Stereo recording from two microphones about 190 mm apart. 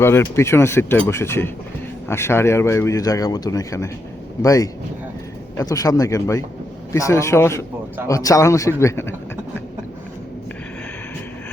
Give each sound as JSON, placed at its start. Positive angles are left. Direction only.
{"t": 0.0, "sound": "speech", "side_deg": 15}